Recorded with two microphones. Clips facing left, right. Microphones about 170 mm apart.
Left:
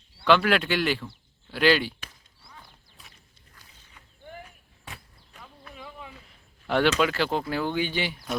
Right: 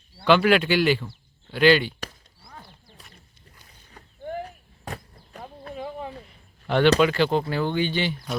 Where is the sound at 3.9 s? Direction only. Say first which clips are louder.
Right 11 dB; 40° right (ahead or behind).